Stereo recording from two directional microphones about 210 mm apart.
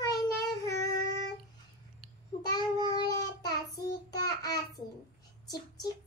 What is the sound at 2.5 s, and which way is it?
Child singing, 20° left (ahead or behind).